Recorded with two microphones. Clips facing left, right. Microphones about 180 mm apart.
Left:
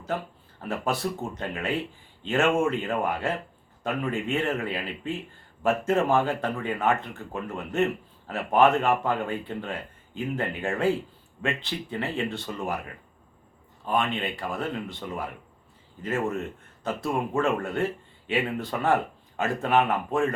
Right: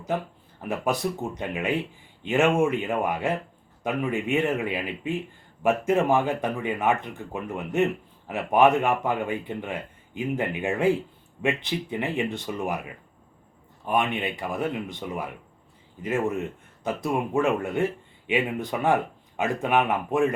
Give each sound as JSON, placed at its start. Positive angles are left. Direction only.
{"t": 0.6, "sound": "speech", "side_deg": -15}